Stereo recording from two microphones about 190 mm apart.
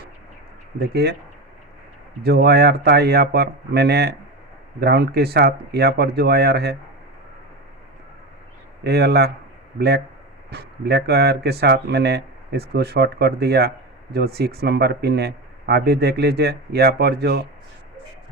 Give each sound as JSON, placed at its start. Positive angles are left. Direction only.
{"t": 0.8, "sound": "speech", "side_deg": -55}
{"t": 2.2, "sound": "speech", "side_deg": -55}
{"t": 8.8, "sound": "speech", "side_deg": -60}